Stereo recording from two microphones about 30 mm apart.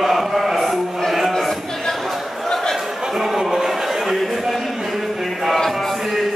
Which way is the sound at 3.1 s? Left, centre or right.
Centre.